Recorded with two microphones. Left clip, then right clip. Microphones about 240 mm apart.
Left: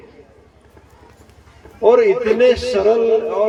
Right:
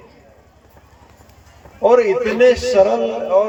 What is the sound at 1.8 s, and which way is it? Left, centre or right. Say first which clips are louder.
A man's voice: left 1 dB; right.